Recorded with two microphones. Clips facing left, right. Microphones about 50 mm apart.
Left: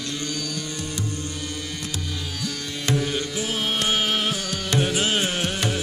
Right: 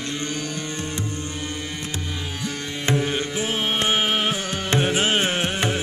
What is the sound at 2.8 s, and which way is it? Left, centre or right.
Carnatic music, right.